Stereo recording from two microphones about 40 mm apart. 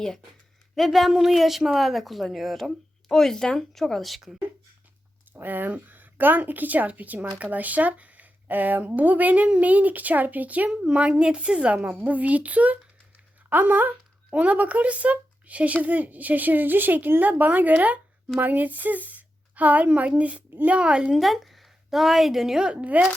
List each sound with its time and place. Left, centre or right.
0.8 s speech: centre
3.1 s a woman's voice: centre
5.3 s speech: right
11.1 s a woman's voice: right
12.0 s speech: right
13.5 s speech: right
14.3 s speech: right
19.9 s a woman's voice: right
21.2 s a woman's voice: centre
22.8 s speech: right